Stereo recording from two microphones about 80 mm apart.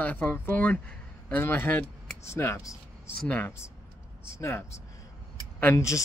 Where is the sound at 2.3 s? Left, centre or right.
Left.